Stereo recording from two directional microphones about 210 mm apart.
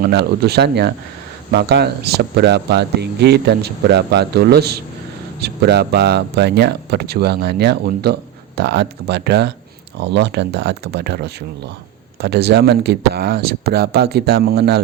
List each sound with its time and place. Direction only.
0.0 s speech: 50° right (ahead or behind)